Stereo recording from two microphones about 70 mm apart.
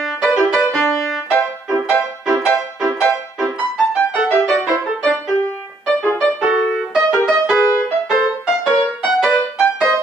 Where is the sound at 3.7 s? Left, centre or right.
Centre.